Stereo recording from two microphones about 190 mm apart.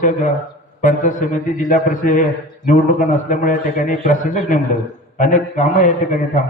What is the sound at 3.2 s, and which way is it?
A man's voice, 40° left (ahead or behind).